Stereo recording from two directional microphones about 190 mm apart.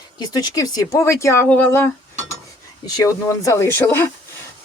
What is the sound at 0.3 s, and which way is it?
Speech, 20° left (ahead or behind).